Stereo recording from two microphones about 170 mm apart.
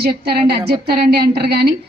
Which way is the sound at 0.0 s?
65° right (ahead or behind).